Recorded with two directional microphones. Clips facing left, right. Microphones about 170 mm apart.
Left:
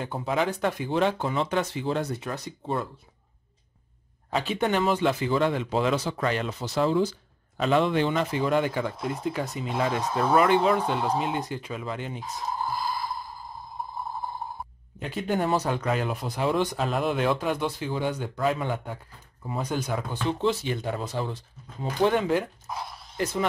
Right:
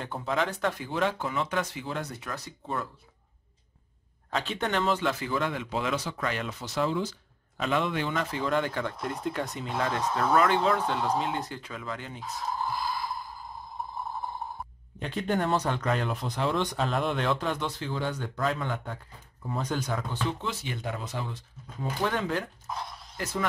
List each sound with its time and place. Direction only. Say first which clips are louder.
0.0 s speech: left 3 dB; 10° left (ahead or behind)
4.3 s speech: left 4 dB; 5° left (ahead or behind)
15.0 s speech: left 2 dB; 5° left (ahead or behind)
20.3 s speech: left 9 dB; 30° left (ahead or behind)
22.0 s speech: left 7 dB; 15° left (ahead or behind)